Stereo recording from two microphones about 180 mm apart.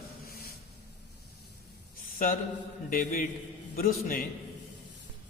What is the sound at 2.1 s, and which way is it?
A man's voice, 50° left (ahead or behind).